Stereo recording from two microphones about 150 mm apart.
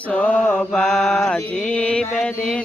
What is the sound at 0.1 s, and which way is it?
Mantra, 10° left (ahead or behind).